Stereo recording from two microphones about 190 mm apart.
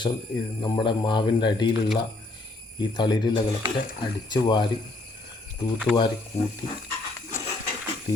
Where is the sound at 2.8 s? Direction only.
25° left (ahead or behind).